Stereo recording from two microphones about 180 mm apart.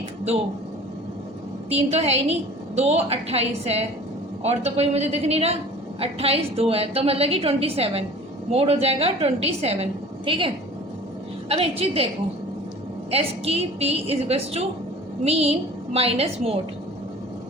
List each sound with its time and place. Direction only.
1.7 s a woman's voice: 35° right (ahead or behind)
13.1 s a woman's voice: 35° right (ahead or behind)